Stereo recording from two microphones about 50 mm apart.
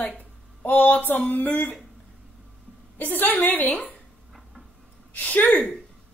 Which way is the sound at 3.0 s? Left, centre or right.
Left.